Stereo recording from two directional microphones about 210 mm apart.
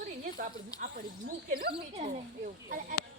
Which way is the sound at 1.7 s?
30° right (ahead or behind).